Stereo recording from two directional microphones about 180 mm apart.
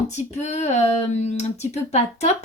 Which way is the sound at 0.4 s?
40° left (ahead or behind).